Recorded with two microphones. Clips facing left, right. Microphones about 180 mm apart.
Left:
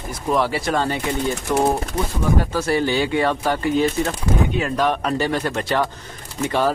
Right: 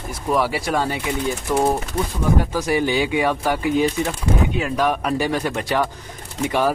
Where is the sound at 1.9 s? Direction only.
20° left (ahead or behind).